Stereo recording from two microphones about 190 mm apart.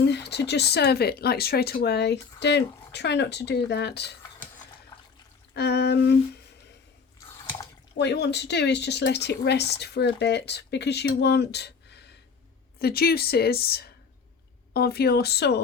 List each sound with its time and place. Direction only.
0.0 s speech: 60° left (ahead or behind)
5.5 s speech: 60° left (ahead or behind)
7.9 s speech: 65° left (ahead or behind)